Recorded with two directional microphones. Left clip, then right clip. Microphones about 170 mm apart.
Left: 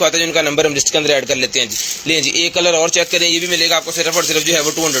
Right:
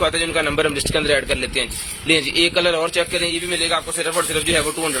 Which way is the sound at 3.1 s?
30° left (ahead or behind).